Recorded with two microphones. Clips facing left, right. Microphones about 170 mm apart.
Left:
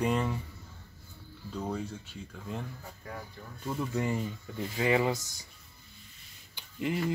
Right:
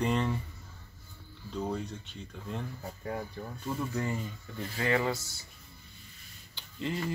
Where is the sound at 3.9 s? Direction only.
15° left (ahead or behind).